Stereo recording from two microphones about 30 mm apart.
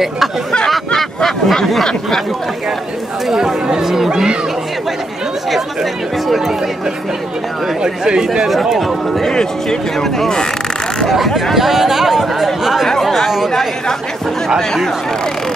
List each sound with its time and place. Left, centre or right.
0.7 s a sound: centre
3.8 s speech: centre
4.1 s speech: right
6.2 s speech: centre
7.8 s speech: right
9.3 s speech: left
9.9 s speech: centre
11.1 s speech: centre
13.0 s chatter: centre